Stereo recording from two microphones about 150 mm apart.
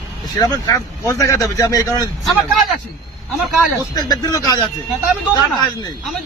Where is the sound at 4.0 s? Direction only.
25° left (ahead or behind).